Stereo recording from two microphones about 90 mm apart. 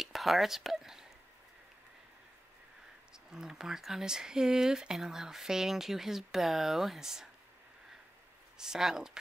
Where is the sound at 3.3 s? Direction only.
5° right (ahead or behind).